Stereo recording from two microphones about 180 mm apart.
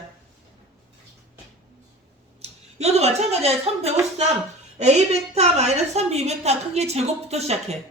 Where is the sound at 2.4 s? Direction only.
35° right (ahead or behind).